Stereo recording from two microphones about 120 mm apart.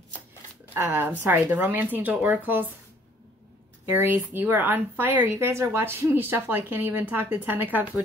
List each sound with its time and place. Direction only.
0.7 s speech: 15° right (ahead or behind)
3.9 s speech: 20° right (ahead or behind)